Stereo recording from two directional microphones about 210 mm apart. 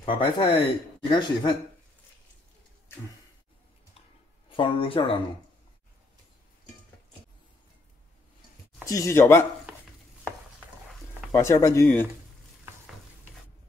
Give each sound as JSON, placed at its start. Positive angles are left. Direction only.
{"t": 0.0, "sound": "speech", "side_deg": 25}
{"t": 4.5, "sound": "speech", "side_deg": 25}
{"t": 8.8, "sound": "speech", "side_deg": 15}
{"t": 11.3, "sound": "speech", "side_deg": 15}
{"t": 11.8, "sound": "speech", "side_deg": 5}